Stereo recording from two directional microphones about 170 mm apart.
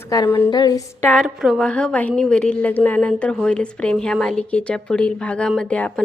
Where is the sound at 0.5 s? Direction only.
20° left (ahead or behind).